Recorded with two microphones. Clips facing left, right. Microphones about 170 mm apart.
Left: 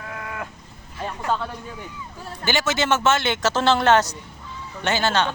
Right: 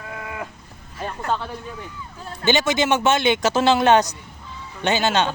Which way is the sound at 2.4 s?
20° right (ahead or behind).